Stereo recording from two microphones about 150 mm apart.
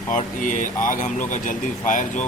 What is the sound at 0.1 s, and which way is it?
Speech, 60° left (ahead or behind).